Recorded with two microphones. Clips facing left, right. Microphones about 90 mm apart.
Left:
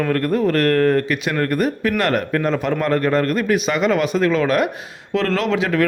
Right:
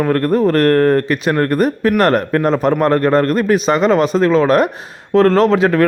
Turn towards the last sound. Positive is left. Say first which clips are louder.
# right 7 dB
turn(degrees=-40)  # may be behind; listen again after turning